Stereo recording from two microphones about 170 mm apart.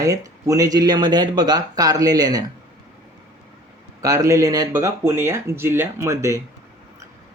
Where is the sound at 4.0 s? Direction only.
20° right (ahead or behind).